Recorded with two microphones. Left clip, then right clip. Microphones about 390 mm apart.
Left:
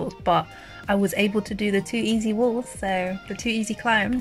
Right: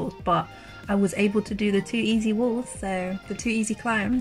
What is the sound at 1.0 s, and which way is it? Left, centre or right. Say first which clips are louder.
Speech: left 1 dB; left.